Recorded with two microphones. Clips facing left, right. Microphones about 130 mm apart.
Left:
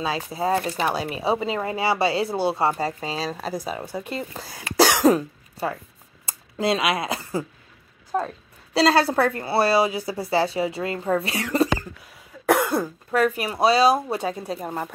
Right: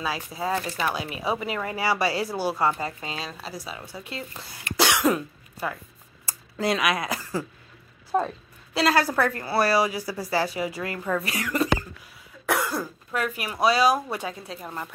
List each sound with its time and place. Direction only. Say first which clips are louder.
0.0 s a woman's voice: left 4 dB; 25° left (ahead or behind)
6.2 s a sound: left 3 dB; 25° left (ahead or behind)
8.1 s a sound: right 1 dB; 5° right (ahead or behind)
8.7 s a woman's voice: left 4 dB; 30° left (ahead or behind)
12.4 s cough: left 6 dB; 50° left (ahead or behind)
12.7 s speech: left 7 dB; 30° left (ahead or behind)